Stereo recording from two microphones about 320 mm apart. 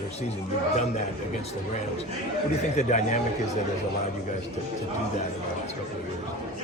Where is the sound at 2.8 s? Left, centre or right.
Left.